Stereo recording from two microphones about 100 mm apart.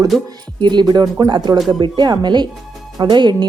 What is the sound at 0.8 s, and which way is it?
A woman's voice, 40° right (ahead or behind).